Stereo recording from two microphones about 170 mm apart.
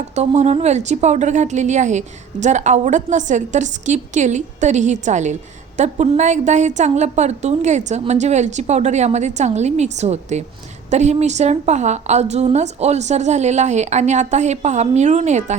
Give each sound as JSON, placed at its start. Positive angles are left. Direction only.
{"t": 0.1, "sound": "a woman's voice", "side_deg": -40}